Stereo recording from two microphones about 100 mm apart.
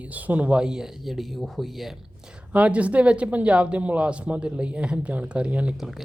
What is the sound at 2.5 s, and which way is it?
Speech, 15° right (ahead or behind).